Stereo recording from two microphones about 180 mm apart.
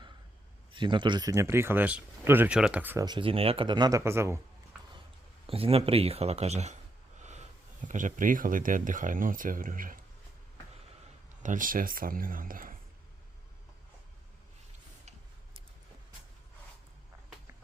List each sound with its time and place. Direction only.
0.7 s speech: 25° right (ahead or behind); by 3.0 s 10° right (ahead or behind)
3.0 s speech: 25° right (ahead or behind)
5.5 s speech: 30° right (ahead or behind)
7.2 s a sound: 40° right (ahead or behind)
7.9 s speech: 45° right (ahead or behind)
11.4 s speech: 45° right (ahead or behind)